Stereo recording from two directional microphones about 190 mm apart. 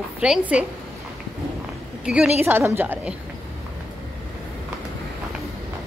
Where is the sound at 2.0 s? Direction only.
5° right (ahead or behind).